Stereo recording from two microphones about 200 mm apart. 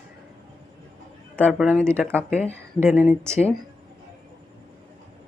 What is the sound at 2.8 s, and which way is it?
Speech, 10° right (ahead or behind).